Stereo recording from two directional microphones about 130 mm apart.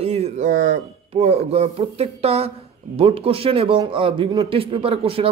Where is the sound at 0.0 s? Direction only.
55° right (ahead or behind).